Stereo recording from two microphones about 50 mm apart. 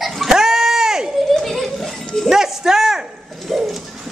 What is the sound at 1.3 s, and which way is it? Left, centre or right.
Children playing, centre.